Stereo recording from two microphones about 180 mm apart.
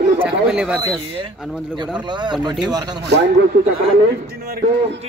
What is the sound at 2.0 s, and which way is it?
Speech, 25° right (ahead or behind).